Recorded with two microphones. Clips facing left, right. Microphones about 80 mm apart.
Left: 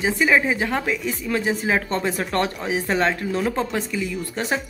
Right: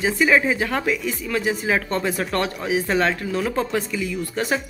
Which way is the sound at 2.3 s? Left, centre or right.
Left.